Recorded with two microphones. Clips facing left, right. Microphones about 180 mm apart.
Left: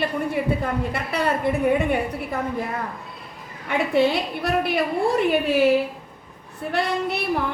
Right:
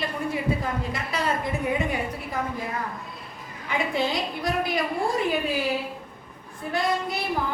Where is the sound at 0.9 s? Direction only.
60° left (ahead or behind).